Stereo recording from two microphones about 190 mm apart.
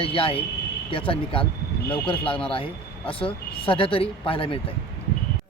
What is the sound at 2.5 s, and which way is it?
Speech, 30° left (ahead or behind).